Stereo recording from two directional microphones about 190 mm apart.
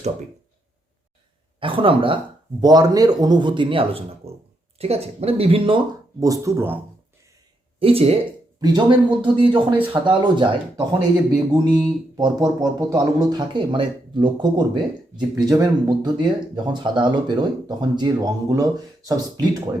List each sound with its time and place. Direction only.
1.5 s speech: 30° right (ahead or behind)
7.8 s speech: 30° right (ahead or behind)
9.7 s speech: 10° right (ahead or behind)
10.1 s speech: 25° right (ahead or behind)